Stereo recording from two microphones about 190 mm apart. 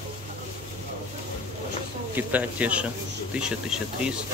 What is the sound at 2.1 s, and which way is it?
Speech, 10° right (ahead or behind).